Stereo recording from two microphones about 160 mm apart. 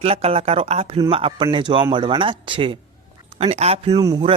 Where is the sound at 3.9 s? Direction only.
25° right (ahead or behind).